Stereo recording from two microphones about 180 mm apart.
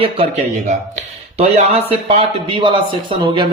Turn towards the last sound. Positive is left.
turn(degrees=-25)  # may be behind; listen again after turning